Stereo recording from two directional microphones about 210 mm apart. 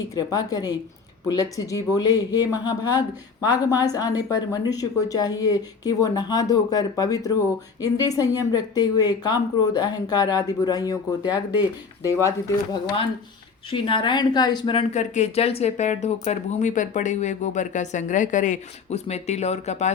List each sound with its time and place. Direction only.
0.0 s a woman's voice: 15° left (ahead or behind)
13.7 s speech: 25° left (ahead or behind)